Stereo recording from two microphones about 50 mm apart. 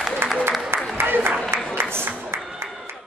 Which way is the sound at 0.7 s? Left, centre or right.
Right.